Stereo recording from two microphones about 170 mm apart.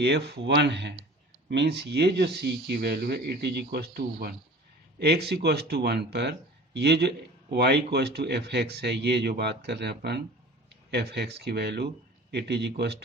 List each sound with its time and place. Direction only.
0.0 s speech: 80° right